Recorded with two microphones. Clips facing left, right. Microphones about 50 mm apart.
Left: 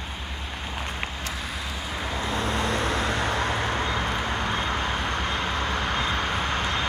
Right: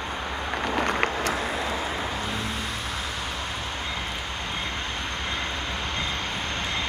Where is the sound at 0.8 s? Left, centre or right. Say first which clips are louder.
Right 8 dB; right.